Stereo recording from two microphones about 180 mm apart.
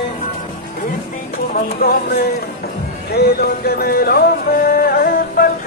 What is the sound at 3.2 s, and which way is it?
Music, 60° left (ahead or behind).